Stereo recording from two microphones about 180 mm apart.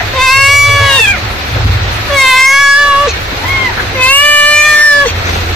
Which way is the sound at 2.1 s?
Centre (ahead or behind).